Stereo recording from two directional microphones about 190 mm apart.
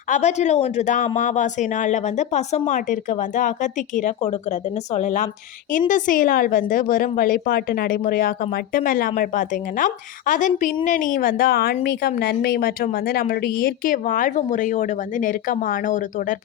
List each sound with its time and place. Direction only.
0.1 s a woman's voice: 35° left (ahead or behind)